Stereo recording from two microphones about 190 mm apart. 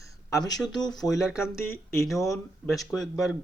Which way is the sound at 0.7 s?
20° left (ahead or behind).